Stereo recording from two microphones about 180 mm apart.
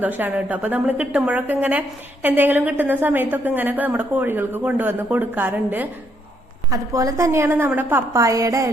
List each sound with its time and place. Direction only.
0.0 s a woman's voice: 10° right (ahead or behind)